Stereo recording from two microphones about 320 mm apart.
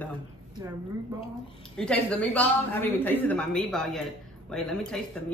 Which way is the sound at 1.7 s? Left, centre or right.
Centre.